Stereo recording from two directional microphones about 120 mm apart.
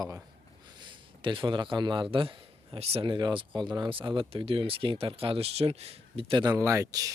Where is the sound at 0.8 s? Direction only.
40° right (ahead or behind).